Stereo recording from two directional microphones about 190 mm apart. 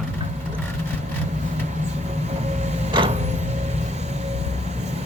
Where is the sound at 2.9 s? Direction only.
25° right (ahead or behind).